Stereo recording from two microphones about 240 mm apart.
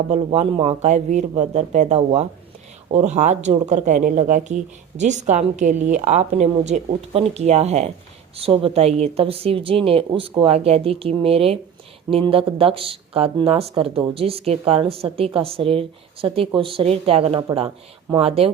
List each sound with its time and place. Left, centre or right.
0.1 s speech: right